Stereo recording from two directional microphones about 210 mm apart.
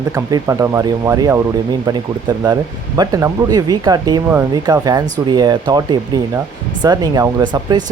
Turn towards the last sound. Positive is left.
turn(degrees=-20)  # may be behind; listen again after turning